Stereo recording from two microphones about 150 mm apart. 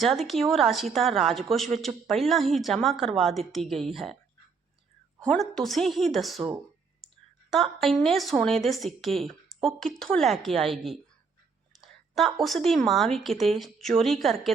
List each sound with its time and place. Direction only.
0.0 s a woman's voice: centre (ahead or behind)
5.2 s a woman's voice: 5° left (ahead or behind)